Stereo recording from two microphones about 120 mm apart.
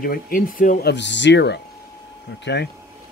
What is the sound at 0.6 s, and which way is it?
Speech, 90° left.